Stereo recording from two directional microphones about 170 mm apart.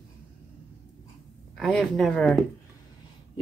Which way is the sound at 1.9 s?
5° left (ahead or behind).